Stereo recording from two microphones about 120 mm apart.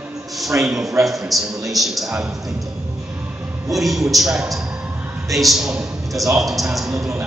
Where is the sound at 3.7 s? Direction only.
Centre (ahead or behind).